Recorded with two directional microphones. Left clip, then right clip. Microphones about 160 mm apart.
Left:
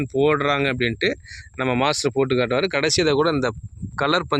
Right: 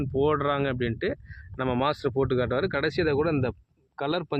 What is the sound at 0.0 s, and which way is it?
Speech, 30° left (ahead or behind).